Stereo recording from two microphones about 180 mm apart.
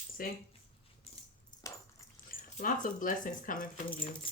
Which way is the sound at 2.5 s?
50° left (ahead or behind).